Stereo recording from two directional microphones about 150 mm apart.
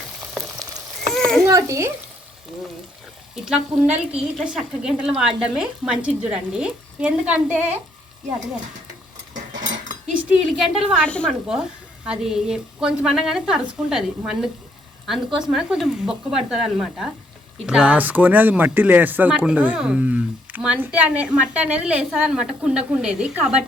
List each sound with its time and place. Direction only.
0.4 s frying: 20° right (ahead or behind)
1.0 s frying: 5° left (ahead or behind)
1.5 s speech: 20° right (ahead or behind)
3.3 s speech: 5° right (ahead or behind)
10.4 s speech: centre (ahead or behind)